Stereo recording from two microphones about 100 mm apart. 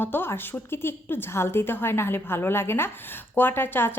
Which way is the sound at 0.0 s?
20° left (ahead or behind).